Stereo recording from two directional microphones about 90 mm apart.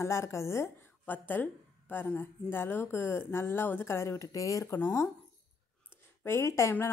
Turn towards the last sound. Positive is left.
turn(degrees=30)  # may be behind; listen again after turning